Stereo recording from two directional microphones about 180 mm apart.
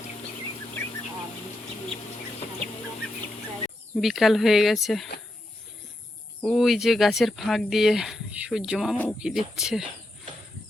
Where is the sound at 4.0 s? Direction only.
Centre (ahead or behind).